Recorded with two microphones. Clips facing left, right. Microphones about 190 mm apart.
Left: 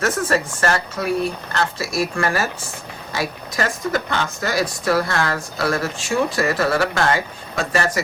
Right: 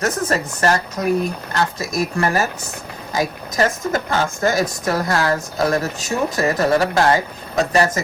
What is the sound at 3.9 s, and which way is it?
Speech, 50° right (ahead or behind).